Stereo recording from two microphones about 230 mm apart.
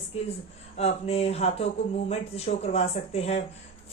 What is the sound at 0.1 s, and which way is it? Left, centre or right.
A woman's voice, left.